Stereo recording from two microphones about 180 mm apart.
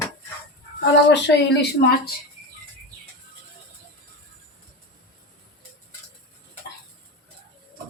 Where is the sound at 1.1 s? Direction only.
65° left (ahead or behind).